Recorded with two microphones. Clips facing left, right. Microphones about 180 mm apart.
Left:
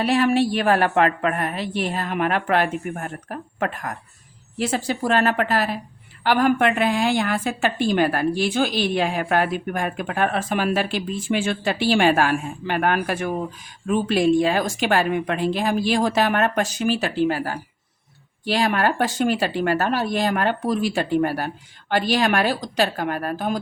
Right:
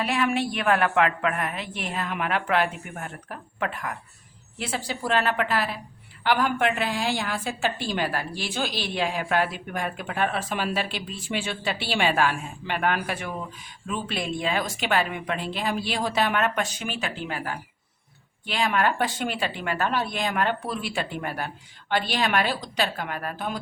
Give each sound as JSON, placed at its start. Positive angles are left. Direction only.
{"t": 0.0, "sound": "a woman's voice", "side_deg": 35}